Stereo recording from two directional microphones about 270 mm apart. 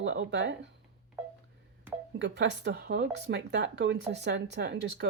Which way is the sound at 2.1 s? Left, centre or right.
Right.